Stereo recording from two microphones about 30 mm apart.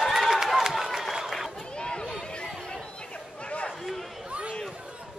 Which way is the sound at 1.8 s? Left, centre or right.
Left.